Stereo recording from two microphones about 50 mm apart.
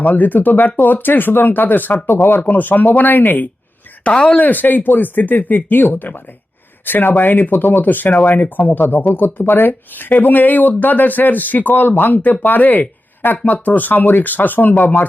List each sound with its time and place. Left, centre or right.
0.0 s speech: left
4.0 s speech: left
4.4 s speech: left